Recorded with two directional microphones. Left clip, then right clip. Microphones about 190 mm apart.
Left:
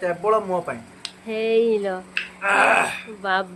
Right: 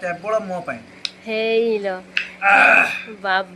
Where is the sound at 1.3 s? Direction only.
10° left (ahead or behind).